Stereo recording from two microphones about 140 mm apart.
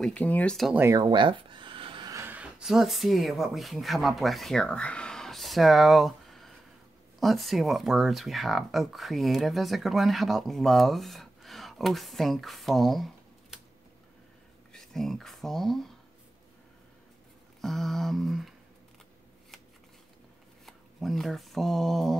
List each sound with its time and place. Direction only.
0.0 s speech: 10° left (ahead or behind)
0.7 s speech: 20° right (ahead or behind)
1.0 s a sound: 35° right (ahead or behind)
2.0 s a sound: 20° right (ahead or behind)
2.3 s speech: 5° right (ahead or behind)
14.7 s speech: 5° left (ahead or behind)
17.6 s speech: centre (ahead or behind)
20.6 s speech: centre (ahead or behind)